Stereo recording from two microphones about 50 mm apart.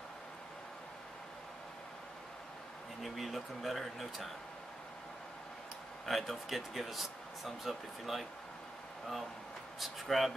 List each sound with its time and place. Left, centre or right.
3.0 s speech: centre
6.0 s speech: centre
9.8 s speech: centre